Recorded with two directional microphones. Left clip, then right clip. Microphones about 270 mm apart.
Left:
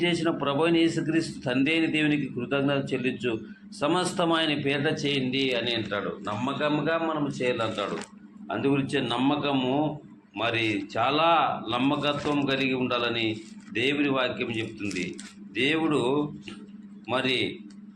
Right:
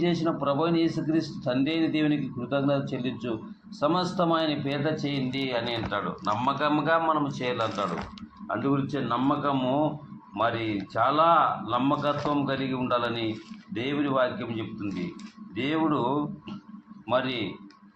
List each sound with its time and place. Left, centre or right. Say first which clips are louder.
0.0 s a man's voice: left 1 dB; left